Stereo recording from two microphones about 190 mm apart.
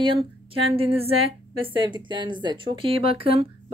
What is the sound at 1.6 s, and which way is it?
A woman's voice, 25° right (ahead or behind).